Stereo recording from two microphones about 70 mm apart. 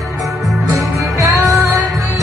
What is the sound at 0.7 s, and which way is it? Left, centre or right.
Music, right.